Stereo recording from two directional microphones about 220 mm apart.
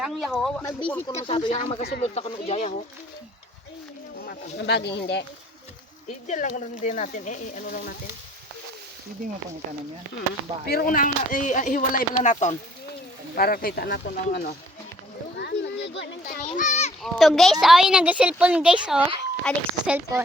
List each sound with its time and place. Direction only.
0.0 s a woman's voice: centre (ahead or behind)
1.0 s speech: 20° left (ahead or behind)
4.5 s speech: 50° left (ahead or behind)
6.2 s speech: 35° left (ahead or behind)
10.7 s speech: 40° left (ahead or behind)
15.4 s a sound: 50° left (ahead or behind)
16.4 s a child's voice: 35° left (ahead or behind)
17.0 s a woman's voice: centre (ahead or behind)